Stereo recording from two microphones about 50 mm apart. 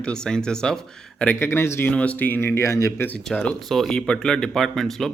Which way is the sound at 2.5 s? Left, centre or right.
Left.